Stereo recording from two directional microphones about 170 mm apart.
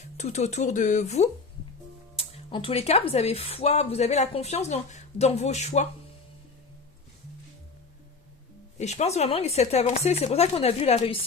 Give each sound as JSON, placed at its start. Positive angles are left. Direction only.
{"t": 0.2, "sound": "speech", "side_deg": 40}
{"t": 8.8, "sound": "speech", "side_deg": 40}